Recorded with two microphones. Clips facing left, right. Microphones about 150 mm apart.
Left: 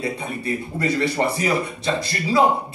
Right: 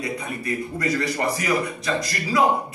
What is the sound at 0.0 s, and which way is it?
Speech, 30° left (ahead or behind).